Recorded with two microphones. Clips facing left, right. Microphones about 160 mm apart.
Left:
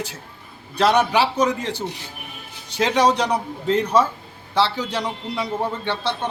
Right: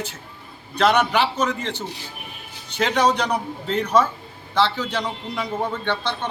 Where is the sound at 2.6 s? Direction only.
35° left (ahead or behind).